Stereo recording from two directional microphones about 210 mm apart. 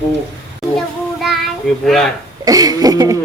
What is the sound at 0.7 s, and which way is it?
Child singing, centre (ahead or behind).